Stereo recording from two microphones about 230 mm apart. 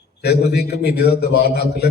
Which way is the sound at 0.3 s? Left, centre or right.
Left.